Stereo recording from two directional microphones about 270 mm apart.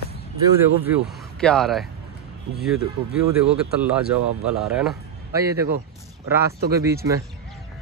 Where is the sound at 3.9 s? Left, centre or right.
Centre.